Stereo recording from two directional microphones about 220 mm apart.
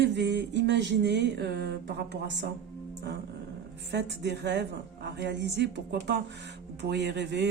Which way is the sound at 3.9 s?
50° right (ahead or behind).